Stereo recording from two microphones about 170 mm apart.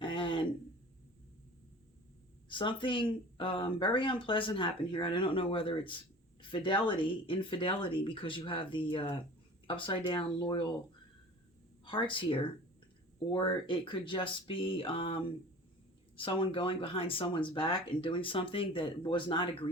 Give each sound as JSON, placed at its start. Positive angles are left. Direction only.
{"t": 0.0, "sound": "a sound", "side_deg": 30}
{"t": 2.5, "sound": "speech", "side_deg": 30}
{"t": 11.9, "sound": "speech", "side_deg": 30}